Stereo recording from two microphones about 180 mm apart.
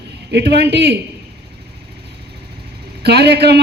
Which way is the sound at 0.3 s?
70° right (ahead or behind).